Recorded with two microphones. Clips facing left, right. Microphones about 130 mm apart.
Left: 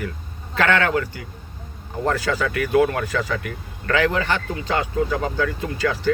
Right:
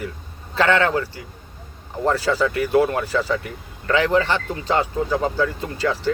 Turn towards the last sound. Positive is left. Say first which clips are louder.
# left 1 dB
turn(degrees=-30)  # may be behind; listen again after turning